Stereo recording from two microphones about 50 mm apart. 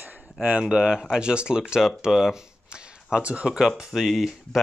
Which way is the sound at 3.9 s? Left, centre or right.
Centre.